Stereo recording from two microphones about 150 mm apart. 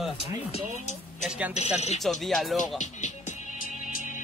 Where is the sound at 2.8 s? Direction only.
55° left (ahead or behind).